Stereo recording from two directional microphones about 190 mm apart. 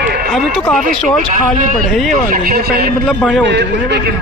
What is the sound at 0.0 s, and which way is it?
Run, 55° right (ahead or behind).